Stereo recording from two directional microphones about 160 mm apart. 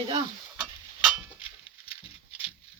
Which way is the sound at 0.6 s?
5° right (ahead or behind).